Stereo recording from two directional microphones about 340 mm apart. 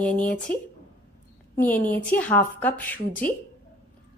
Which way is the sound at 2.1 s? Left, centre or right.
Centre.